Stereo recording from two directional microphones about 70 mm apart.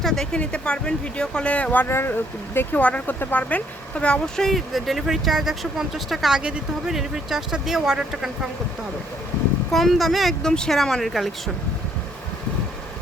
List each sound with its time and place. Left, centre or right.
0.0 s speech: centre
0.3 s speech: centre
6.4 s speech: centre
9.7 s speech: centre